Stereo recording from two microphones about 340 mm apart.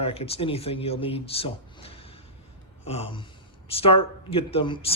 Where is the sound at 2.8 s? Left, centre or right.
Centre.